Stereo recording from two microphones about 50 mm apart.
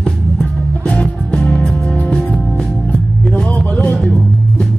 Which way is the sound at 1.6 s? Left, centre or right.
Left.